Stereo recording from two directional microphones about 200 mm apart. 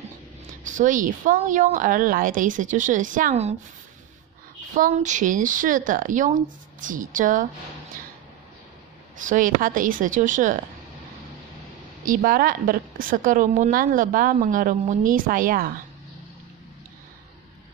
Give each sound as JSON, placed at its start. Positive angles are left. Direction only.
{"t": 0.7, "sound": "a woman's voice", "side_deg": -40}
{"t": 4.7, "sound": "a woman's voice", "side_deg": -40}
{"t": 9.2, "sound": "a woman's voice", "side_deg": -40}
{"t": 12.0, "sound": "a woman's voice", "side_deg": -45}